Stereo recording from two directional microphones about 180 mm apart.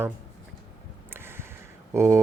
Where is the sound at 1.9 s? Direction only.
15° right (ahead or behind).